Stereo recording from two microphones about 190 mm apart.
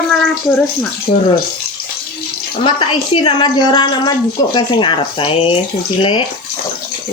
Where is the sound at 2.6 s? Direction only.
25° left (ahead or behind).